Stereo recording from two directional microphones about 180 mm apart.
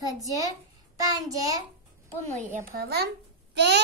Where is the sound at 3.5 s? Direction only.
70° right (ahead or behind).